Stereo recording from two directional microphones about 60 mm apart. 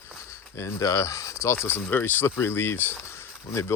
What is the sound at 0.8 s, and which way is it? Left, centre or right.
Speech, left.